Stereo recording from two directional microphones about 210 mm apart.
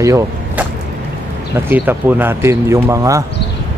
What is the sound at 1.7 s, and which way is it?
Speech, 10° right (ahead or behind).